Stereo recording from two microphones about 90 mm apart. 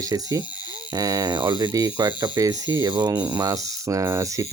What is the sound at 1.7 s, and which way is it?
Speech, 50° right (ahead or behind).